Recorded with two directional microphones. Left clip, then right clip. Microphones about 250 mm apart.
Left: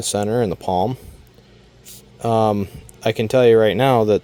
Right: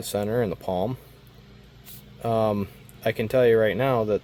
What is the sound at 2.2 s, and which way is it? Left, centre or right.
Speech, left.